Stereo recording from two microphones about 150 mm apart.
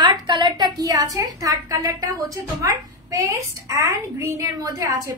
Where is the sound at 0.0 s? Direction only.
30° right (ahead or behind).